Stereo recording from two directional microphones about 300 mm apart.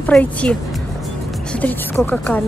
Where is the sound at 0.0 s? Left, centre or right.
Centre.